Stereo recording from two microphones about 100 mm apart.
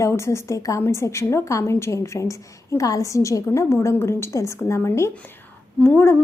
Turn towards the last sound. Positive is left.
turn(degrees=25)  # may be behind; listen again after turning